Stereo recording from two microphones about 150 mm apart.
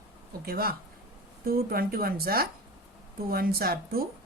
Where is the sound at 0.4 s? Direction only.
85° right.